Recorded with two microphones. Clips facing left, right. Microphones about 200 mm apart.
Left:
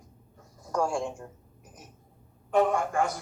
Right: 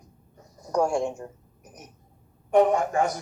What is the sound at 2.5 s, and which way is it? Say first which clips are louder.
Speech: right 4 dB; 20° right (ahead or behind).